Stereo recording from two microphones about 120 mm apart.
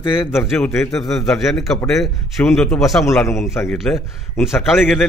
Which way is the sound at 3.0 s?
25° left (ahead or behind).